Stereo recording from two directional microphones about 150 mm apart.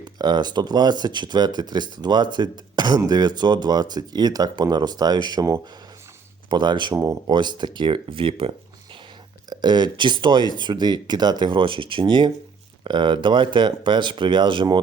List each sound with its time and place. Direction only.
0.0 s speech: 30° right (ahead or behind)